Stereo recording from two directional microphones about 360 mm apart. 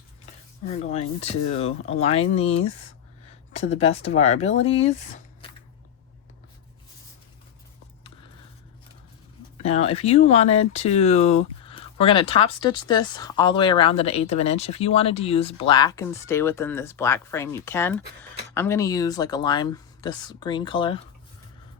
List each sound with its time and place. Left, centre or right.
0.6 s speech: centre
9.6 s speech: centre